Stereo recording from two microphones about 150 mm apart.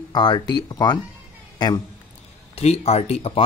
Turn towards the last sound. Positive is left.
turn(degrees=45)  # may be behind; listen again after turning